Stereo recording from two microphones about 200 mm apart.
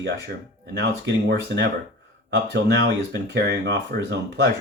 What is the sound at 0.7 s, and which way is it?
Speech, 60° right (ahead or behind).